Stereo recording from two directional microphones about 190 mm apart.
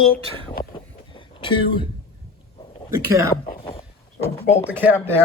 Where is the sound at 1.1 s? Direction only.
25° left (ahead or behind).